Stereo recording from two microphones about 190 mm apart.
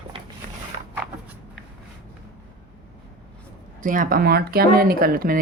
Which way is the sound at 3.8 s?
45° right (ahead or behind).